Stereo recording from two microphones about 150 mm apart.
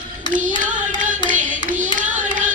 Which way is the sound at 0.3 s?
60° right (ahead or behind).